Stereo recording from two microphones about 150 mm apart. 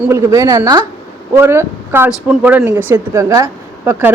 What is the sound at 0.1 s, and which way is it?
Speech, 20° right (ahead or behind).